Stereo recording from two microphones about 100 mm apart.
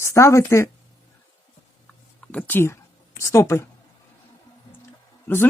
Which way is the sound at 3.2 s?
30° left (ahead or behind).